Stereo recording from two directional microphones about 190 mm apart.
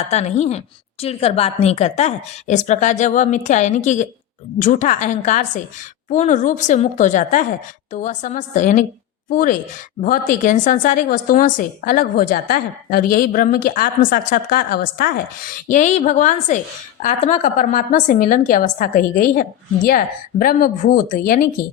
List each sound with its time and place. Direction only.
0.0 s a woman's voice: 35° left (ahead or behind)